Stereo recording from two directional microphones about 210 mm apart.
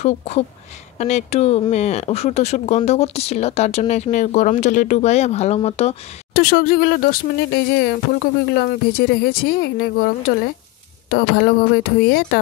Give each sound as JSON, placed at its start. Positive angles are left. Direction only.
{"t": 0.9, "sound": "speech", "side_deg": 35}
{"t": 6.3, "sound": "speech", "side_deg": 45}